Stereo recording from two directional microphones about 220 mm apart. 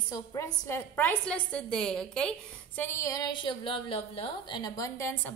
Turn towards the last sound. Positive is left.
turn(degrees=10)  # may be behind; listen again after turning